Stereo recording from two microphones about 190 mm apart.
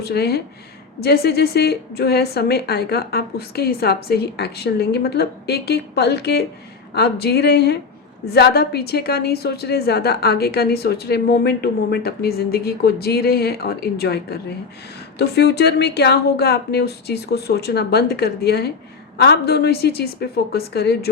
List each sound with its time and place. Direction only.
0.0 s a woman's voice: 55° left (ahead or behind)
15.4 s a woman's voice: 60° left (ahead or behind)